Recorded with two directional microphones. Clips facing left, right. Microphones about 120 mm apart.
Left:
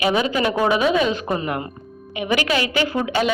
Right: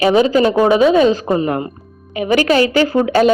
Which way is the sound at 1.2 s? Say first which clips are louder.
Right 7 dB; 25° right (ahead or behind).